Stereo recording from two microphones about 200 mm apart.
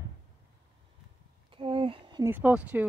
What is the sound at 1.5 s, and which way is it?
Speech, 25° right (ahead or behind).